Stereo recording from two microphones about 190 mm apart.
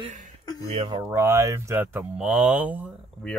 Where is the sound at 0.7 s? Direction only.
30° right (ahead or behind).